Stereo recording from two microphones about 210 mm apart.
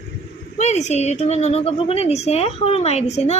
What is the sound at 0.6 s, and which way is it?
A woman's voice, 35° left (ahead or behind).